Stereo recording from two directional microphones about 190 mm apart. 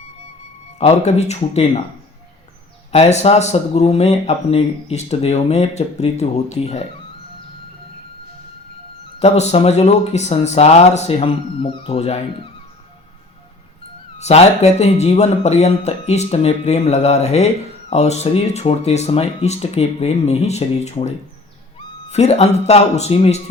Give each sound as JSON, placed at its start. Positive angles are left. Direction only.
{"t": 0.8, "sound": "speech", "side_deg": 35}
{"t": 2.9, "sound": "speech", "side_deg": 35}
{"t": 9.1, "sound": "speech", "side_deg": 35}
{"t": 14.2, "sound": "a man's voice", "side_deg": 35}